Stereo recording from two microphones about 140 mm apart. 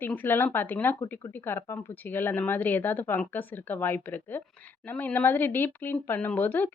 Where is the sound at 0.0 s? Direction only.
15° left (ahead or behind).